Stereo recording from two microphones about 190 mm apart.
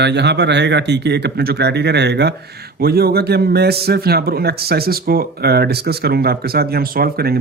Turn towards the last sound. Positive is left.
turn(degrees=-55)  # may be behind; listen again after turning